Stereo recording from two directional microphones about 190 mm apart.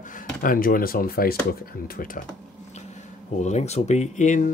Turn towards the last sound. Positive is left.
turn(degrees=40)  # may be behind; listen again after turning